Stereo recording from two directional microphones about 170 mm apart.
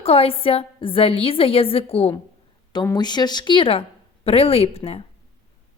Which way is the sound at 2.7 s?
25° left (ahead or behind).